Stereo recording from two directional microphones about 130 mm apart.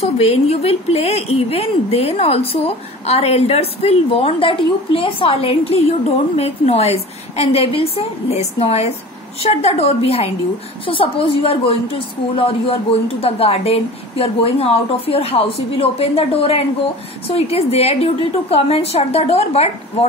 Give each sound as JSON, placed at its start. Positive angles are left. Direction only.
{"t": 0.0, "sound": "speech", "side_deg": 50}